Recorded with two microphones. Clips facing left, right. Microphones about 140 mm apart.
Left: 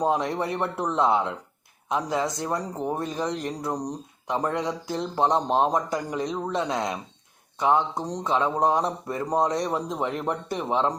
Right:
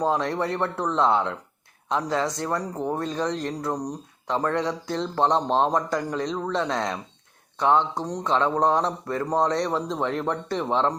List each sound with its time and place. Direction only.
0.0 s speech: 15° left (ahead or behind)